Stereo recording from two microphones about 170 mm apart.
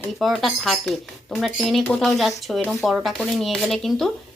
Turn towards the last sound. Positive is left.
turn(degrees=0)  # may be behind; listen again after turning